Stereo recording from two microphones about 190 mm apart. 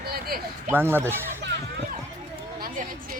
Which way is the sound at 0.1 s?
50° right (ahead or behind).